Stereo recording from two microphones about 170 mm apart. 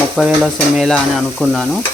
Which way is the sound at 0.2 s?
Centre (ahead or behind).